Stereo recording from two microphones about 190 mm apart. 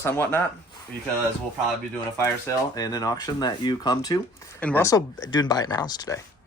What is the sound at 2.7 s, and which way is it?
Speech, 20° left (ahead or behind).